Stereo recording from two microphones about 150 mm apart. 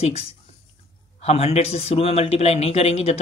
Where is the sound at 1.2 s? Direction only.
45° left (ahead or behind).